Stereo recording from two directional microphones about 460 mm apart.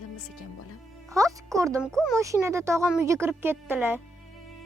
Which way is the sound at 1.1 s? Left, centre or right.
Centre.